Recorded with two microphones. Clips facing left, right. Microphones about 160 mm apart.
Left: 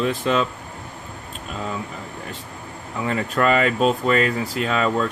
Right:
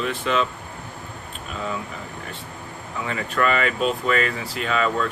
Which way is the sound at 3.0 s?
35° left (ahead or behind).